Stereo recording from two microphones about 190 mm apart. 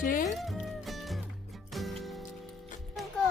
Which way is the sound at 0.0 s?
45° left (ahead or behind).